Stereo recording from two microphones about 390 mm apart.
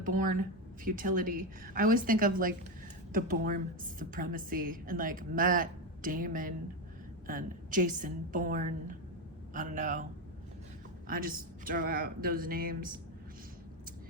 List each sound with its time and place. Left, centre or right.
0.0 s a woman's voice: right
11.1 s a woman's voice: right